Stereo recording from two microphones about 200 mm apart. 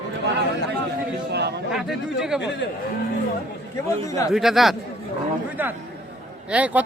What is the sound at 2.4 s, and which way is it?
Speech, 60° left (ahead or behind).